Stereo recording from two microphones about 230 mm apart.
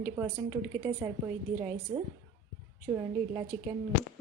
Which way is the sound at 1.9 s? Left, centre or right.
Right.